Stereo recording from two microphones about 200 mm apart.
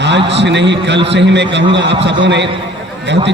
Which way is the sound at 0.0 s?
60° right (ahead or behind).